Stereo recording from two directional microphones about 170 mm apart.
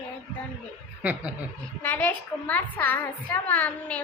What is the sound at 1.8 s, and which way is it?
Child singing, 10° left (ahead or behind).